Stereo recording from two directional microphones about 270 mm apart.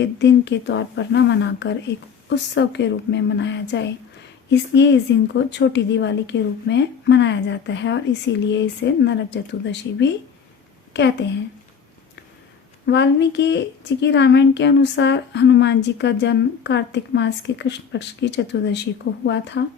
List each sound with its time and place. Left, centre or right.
0.0 s a woman's voice: left
12.8 s a woman's voice: left